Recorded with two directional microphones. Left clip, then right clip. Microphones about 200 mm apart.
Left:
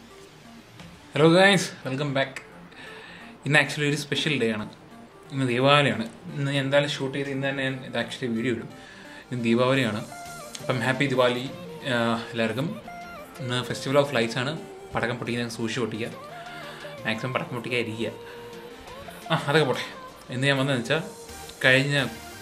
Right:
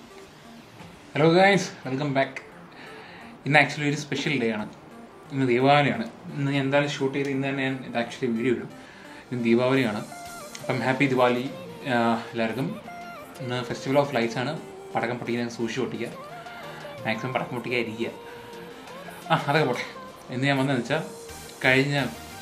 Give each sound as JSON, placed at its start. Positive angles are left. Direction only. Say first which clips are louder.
{"t": 1.1, "sound": "a man's voice", "louder": "left 1 dB", "side_deg": 30}
{"t": 3.4, "sound": "a man's voice", "louder": "right 1 dB", "side_deg": 30}
{"t": 10.1, "sound": "music", "louder": "even", "side_deg": 0}
{"t": 10.5, "sound": "a man's voice", "louder": "even", "side_deg": 30}
{"t": 19.2, "sound": "a man's voice", "louder": "even", "side_deg": 25}